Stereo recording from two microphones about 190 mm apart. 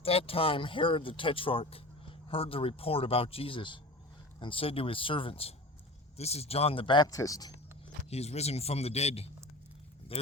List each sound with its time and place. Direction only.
0.0 s speech: 30° left (ahead or behind)
8.1 s speech: 35° left (ahead or behind)